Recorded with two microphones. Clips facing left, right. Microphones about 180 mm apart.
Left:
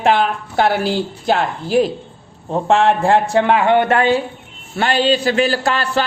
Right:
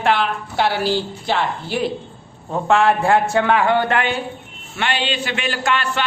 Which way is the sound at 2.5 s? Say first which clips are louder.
Left 2 dB; 30° left (ahead or behind).